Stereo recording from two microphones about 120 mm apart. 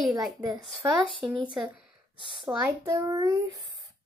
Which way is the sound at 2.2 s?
40° right (ahead or behind).